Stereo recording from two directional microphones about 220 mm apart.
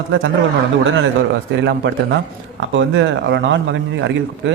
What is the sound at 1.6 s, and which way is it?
A man's voice, 50° right (ahead or behind).